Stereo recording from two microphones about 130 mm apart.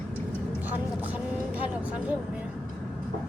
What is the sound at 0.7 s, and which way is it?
Speech, 10° right (ahead or behind).